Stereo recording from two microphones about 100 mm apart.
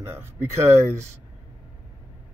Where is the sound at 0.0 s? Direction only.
25° right (ahead or behind).